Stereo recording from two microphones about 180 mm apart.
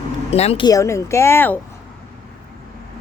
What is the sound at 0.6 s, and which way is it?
Speech, 15° left (ahead or behind).